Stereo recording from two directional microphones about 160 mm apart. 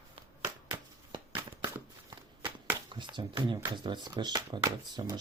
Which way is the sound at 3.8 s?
30° right (ahead or behind).